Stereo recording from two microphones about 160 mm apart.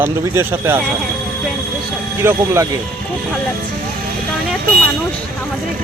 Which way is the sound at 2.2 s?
15° right (ahead or behind).